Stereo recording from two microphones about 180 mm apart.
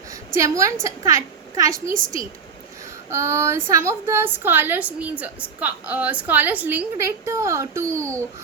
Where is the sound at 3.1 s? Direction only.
15° right (ahead or behind).